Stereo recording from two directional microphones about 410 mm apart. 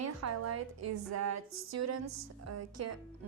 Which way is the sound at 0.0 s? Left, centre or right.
Right.